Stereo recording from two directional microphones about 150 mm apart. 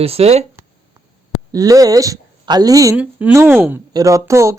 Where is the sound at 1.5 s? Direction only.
25° right (ahead or behind).